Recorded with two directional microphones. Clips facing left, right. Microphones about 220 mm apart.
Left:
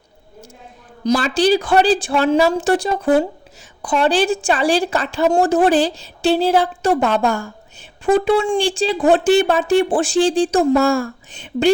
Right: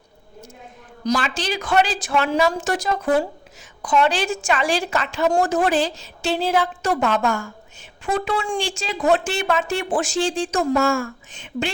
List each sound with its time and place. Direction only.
1.0 s a woman's voice: 35° left (ahead or behind)